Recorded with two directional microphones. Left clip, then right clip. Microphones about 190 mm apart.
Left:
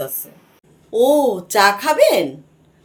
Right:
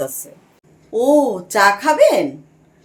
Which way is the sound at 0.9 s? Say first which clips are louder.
Even; 10° right (ahead or behind).